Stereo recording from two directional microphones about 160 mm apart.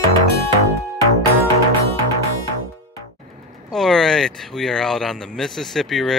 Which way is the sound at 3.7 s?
Centre (ahead or behind).